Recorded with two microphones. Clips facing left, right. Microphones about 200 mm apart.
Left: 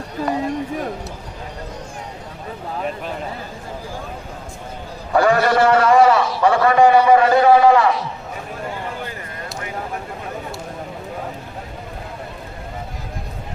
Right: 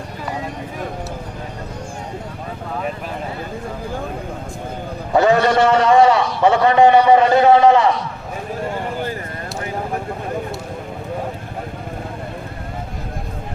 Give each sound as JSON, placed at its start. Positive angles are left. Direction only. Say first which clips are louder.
{"t": 5.1, "sound": "a man's voice", "louder": "right 1 dB", "side_deg": -20}